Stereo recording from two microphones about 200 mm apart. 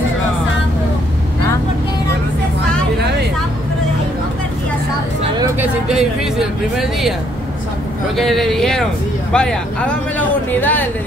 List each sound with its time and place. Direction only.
5.6 s speech: 5° right (ahead or behind)
8.2 s speech: centre (ahead or behind)